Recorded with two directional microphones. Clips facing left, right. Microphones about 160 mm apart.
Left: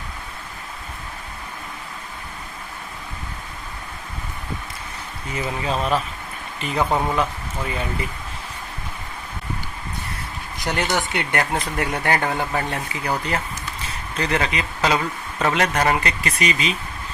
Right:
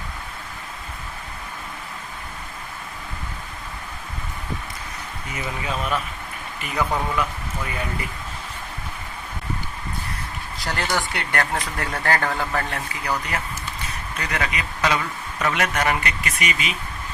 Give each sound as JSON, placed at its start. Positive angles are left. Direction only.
{"t": 5.3, "sound": "speech", "side_deg": 30}
{"t": 10.6, "sound": "speech", "side_deg": 20}